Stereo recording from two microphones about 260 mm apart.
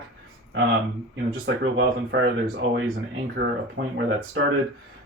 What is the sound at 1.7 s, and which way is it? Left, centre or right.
Speech, right.